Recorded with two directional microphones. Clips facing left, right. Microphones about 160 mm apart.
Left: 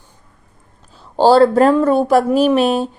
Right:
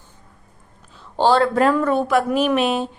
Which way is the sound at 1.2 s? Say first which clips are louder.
Left 6 dB; 35° left (ahead or behind).